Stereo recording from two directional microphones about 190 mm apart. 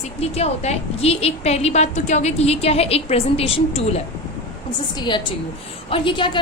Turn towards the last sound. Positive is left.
turn(degrees=25)  # may be behind; listen again after turning